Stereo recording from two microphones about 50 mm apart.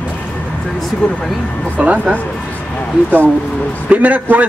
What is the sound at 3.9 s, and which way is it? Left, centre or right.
Speech, right.